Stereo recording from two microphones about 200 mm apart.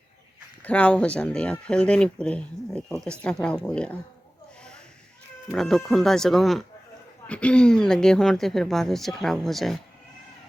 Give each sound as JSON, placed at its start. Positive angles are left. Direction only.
{"t": 0.6, "sound": "speech", "side_deg": 5}
{"t": 5.5, "sound": "speech", "side_deg": 0}